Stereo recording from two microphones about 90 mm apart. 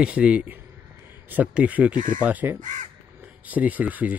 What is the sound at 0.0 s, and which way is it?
Speech, 15° right (ahead or behind).